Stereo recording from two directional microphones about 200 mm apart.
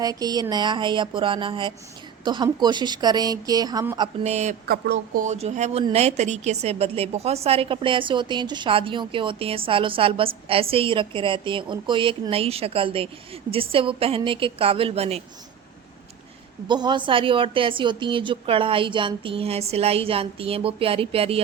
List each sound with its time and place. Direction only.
0.0 s a woman's voice: 20° right (ahead or behind)
4.2 s speech: 35° right (ahead or behind)
4.7 s a woman's voice: 50° right (ahead or behind); by 15.2 s 30° right (ahead or behind)
16.6 s a woman's voice: 20° right (ahead or behind)